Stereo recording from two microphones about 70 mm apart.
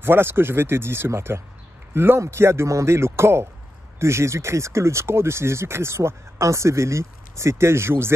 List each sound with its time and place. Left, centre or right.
0.0 s speech: right